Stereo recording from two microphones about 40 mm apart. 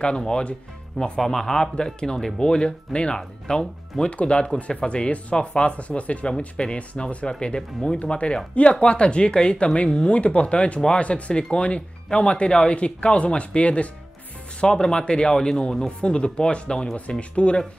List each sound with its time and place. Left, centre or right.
0.9 s speech: centre; by 13.8 s left
14.6 s speech: centre
16.0 s speech: left